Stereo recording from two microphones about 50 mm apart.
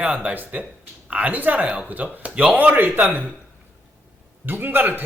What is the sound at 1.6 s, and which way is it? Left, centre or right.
Speech, right.